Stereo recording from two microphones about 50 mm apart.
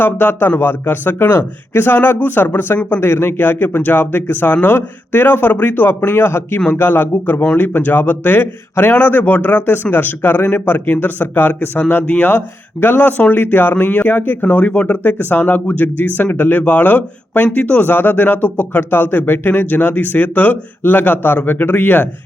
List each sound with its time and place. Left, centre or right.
0.0 s speech: left
3.0 s speech: left
6.1 s speech: left
14.6 s speech: left